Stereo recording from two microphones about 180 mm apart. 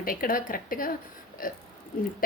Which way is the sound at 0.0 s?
50° left (ahead or behind).